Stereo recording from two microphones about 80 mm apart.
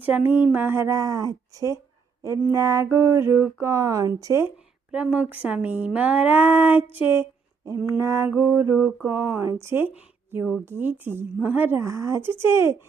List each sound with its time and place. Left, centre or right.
0.0 s speech: right
0.9 s speech: right
2.2 s a sound: right
4.4 s speech: centre
6.9 s speech: left
7.9 s a sound: right
10.7 s speech: right
11.8 s a sound: right
12.4 s speech: right